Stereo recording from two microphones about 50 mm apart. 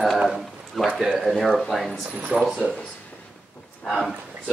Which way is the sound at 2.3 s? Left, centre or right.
Centre.